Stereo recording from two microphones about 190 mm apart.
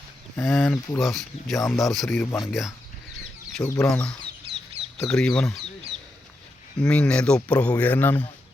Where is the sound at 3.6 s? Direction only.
10° left (ahead or behind).